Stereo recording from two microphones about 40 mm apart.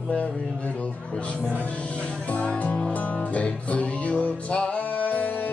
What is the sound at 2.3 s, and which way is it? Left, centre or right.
Speech, left.